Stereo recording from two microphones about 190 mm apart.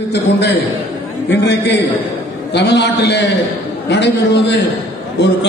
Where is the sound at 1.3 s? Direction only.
65° left (ahead or behind).